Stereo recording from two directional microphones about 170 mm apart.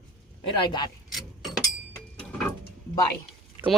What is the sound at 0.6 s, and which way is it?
Speech, 25° left (ahead or behind).